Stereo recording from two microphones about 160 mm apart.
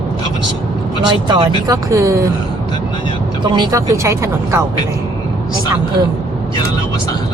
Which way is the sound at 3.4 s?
25° right (ahead or behind).